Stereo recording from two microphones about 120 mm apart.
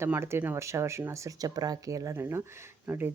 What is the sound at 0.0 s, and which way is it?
Speech, 20° right (ahead or behind).